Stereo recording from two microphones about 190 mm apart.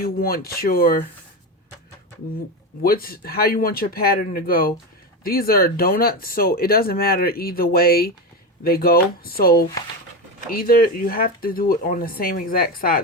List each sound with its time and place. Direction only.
0.0 s speech: 50° left (ahead or behind)
2.8 s speech: 50° left (ahead or behind)